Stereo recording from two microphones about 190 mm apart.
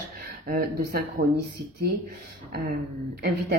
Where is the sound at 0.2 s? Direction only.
50° right (ahead or behind).